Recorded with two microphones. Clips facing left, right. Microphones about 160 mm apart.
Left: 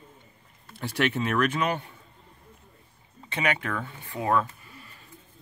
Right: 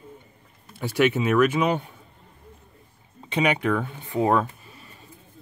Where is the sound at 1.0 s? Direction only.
5° right (ahead or behind).